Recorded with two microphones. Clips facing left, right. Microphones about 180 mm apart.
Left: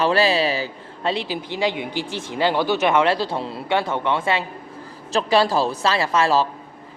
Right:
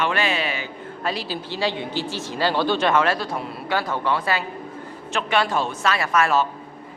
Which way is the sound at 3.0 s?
30° left (ahead or behind).